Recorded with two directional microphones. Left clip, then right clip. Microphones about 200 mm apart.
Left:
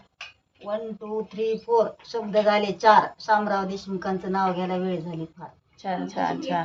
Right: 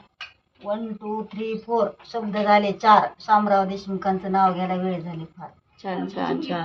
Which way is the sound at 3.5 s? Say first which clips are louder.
Right 6 dB; 15° left (ahead or behind).